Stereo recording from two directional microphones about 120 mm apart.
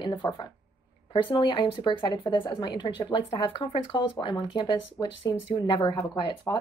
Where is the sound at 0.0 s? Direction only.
40° left (ahead or behind).